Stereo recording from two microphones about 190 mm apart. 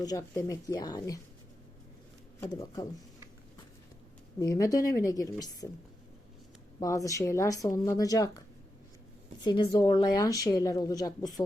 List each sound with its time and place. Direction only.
0.0 s speech: 20° left (ahead or behind)
2.6 s speech: 20° left (ahead or behind)
4.4 s a woman's voice: 15° left (ahead or behind)
6.7 s a woman's voice: 15° left (ahead or behind)
9.4 s speech: 25° left (ahead or behind)